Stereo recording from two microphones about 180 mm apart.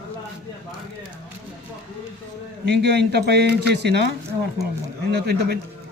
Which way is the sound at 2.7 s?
70° right (ahead or behind).